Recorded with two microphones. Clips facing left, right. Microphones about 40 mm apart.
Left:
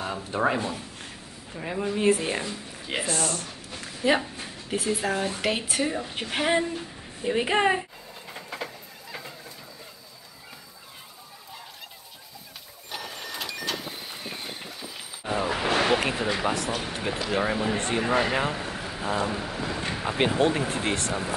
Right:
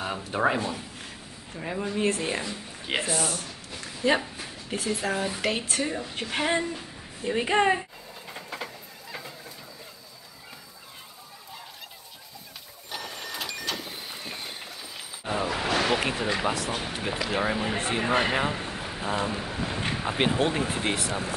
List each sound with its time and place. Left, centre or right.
0.0 s a man's voice: centre
3.7 s a woman's voice: centre
8.3 s vehicle: centre
12.9 s vehicle: centre
15.5 s a sound: centre
15.9 s a sound: centre
16.3 s a woman's voice: centre